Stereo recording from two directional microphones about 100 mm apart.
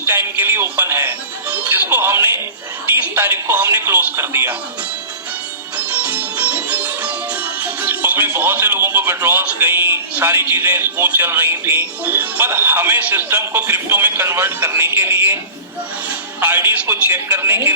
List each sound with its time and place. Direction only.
0.0 s speech: 25° right (ahead or behind)
5.7 s music: 15° right (ahead or behind)
7.6 s speech: 20° right (ahead or behind)
16.4 s speech: 20° right (ahead or behind)